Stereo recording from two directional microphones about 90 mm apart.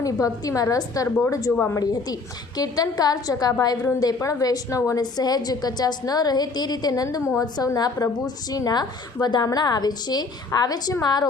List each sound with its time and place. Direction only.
0.0 s a woman's voice: 40° left (ahead or behind)